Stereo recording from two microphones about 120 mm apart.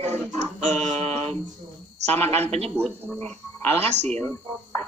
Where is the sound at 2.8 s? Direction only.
10° left (ahead or behind).